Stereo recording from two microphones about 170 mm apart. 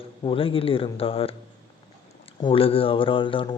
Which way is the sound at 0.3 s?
30° left (ahead or behind).